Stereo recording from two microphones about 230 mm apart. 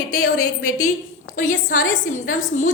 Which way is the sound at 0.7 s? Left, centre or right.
Left.